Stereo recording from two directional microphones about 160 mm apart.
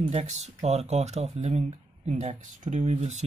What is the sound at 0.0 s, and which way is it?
Speech, 45° right (ahead or behind).